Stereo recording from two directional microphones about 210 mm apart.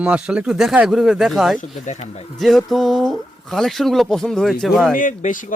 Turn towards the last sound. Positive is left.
turn(degrees=40)  # may be behind; listen again after turning